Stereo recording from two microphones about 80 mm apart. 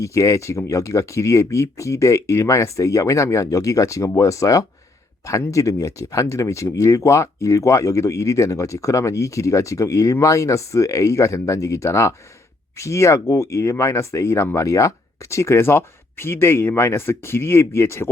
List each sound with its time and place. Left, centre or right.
0.0 s speech: left